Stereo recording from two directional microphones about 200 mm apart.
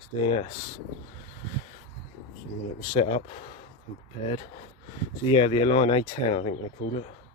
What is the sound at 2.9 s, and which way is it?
Speech, 30° left (ahead or behind).